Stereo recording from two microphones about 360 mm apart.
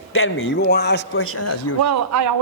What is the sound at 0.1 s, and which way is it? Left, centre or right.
A man's voice, left.